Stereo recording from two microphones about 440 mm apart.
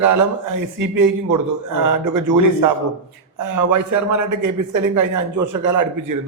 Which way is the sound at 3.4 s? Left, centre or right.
Right.